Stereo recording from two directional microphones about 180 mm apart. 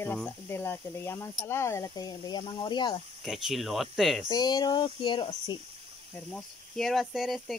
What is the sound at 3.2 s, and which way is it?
Speech, centre (ahead or behind).